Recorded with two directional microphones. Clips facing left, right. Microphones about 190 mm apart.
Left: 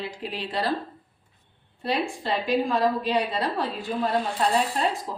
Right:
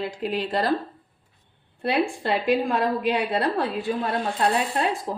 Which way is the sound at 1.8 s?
60° right (ahead or behind).